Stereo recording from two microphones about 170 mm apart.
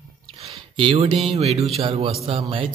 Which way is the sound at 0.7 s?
30° right (ahead or behind).